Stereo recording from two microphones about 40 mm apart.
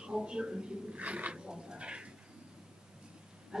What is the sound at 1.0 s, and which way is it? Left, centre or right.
Speech, right.